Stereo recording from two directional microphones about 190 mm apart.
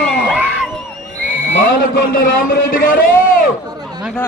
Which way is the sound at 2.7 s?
45° left (ahead or behind).